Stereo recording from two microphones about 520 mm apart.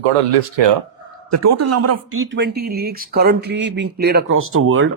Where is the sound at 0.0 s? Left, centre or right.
Right.